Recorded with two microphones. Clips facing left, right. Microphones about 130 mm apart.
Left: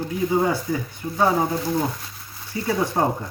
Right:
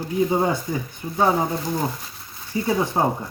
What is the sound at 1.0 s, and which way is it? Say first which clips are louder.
Speech: left 2 dB; 20° right (ahead or behind).